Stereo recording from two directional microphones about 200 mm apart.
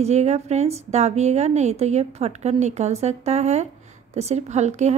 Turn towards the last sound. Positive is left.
turn(degrees=-35)  # may be behind; listen again after turning